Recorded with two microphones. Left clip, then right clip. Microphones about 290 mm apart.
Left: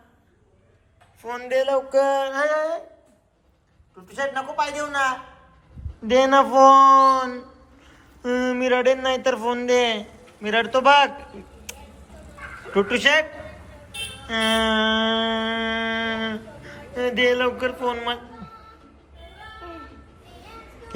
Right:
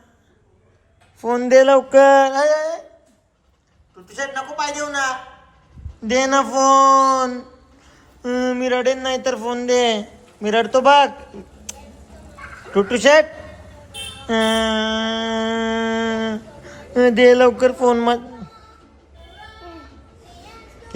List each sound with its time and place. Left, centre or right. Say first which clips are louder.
1.2 s a man's voice: right 11 dB; centre
1.6 s a sound: right 6 dB; right
2.2 s a man's voice: right 6 dB; centre
4.0 s a man's voice: even; centre
12.7 s a man's voice: right 6 dB; centre
14.3 s a sound: right 3 dB; centre